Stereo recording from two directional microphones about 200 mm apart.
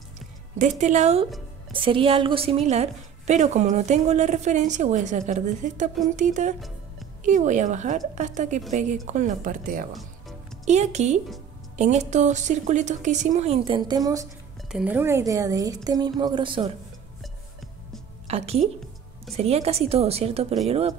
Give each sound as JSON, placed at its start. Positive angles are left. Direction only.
{"t": 0.6, "sound": "a woman's voice", "side_deg": -35}
{"t": 14.7, "sound": "a woman's voice", "side_deg": -5}
{"t": 18.2, "sound": "a woman's voice", "side_deg": -30}